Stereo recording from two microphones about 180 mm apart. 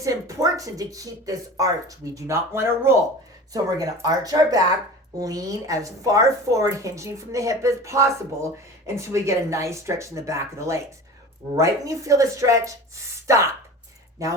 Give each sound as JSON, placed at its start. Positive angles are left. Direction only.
{"t": 0.0, "sound": "a woman's voice", "side_deg": -20}